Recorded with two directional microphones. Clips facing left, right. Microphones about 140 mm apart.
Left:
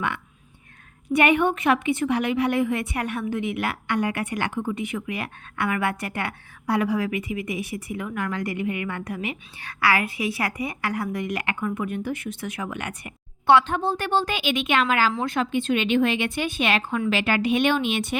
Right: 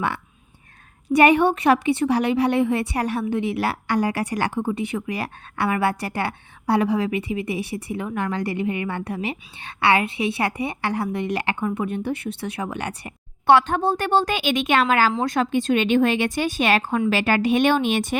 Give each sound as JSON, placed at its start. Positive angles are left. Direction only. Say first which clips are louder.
{"t": 1.1, "sound": "a woman's voice", "louder": "right 4 dB", "side_deg": -35}
{"t": 13.5, "sound": "a woman's voice", "louder": "right 2 dB", "side_deg": -45}